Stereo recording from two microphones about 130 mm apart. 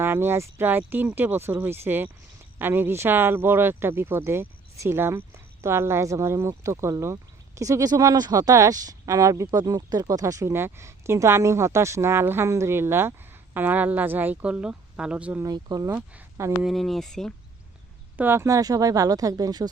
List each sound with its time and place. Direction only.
0.0 s speech: 20° right (ahead or behind)
15.4 s speech: 30° right (ahead or behind)
15.9 s speech: 15° right (ahead or behind)
16.7 s speech: centre (ahead or behind)
18.2 s speech: 20° right (ahead or behind)